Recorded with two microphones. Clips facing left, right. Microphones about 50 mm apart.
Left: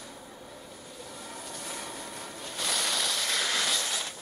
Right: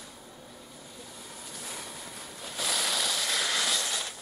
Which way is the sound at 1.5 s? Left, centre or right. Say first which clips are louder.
Left 1 dB; centre.